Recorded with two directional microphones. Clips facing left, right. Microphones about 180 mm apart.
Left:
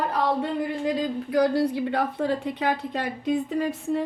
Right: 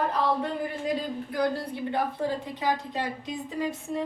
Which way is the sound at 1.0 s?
85° left.